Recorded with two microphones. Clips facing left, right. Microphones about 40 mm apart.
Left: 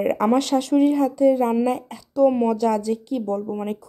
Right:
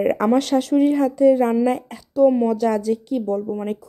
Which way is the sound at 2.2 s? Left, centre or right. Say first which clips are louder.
Right 2 dB; centre.